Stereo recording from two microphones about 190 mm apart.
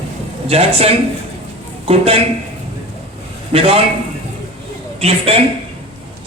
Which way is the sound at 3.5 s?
30° right (ahead or behind).